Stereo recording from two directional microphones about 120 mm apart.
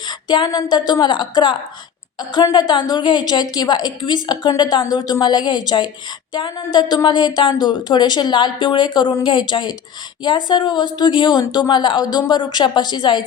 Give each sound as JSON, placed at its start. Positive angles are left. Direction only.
{"t": 0.1, "sound": "a woman's voice", "side_deg": 35}